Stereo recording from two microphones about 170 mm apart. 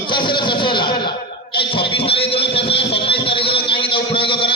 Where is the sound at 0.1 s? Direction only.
30° left (ahead or behind).